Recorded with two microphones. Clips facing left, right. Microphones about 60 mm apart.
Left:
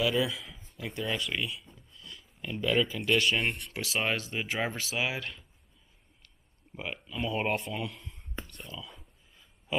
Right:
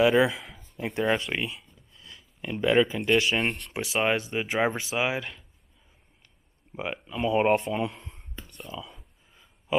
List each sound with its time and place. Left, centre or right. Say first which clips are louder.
0.0 s a man's voice: right 8 dB; right
1.9 s a sound: left 1 dB; right
2.4 s a man's voice: right 6 dB; right
3.2 s a man's voice: right 3 dB; centre
6.7 s a man's voice: right 5 dB; centre
9.3 s a sound: right 6 dB; centre